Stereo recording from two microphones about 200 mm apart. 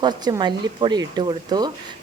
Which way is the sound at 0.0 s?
20° right (ahead or behind).